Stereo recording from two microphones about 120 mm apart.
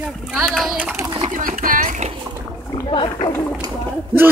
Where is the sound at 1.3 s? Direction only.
90° right.